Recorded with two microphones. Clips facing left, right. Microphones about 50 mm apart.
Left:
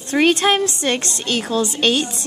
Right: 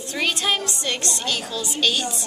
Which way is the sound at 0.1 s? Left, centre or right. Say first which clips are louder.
Left 8 dB; left.